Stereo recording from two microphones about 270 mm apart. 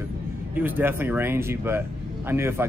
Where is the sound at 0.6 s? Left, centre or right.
Centre.